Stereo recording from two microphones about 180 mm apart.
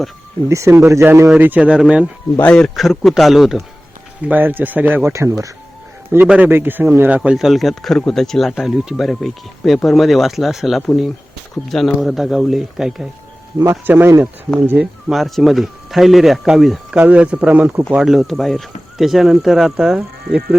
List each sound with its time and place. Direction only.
0.4 s speech: 15° right (ahead or behind)
2.3 s speech: 10° left (ahead or behind)
13.6 s speech: 15° right (ahead or behind)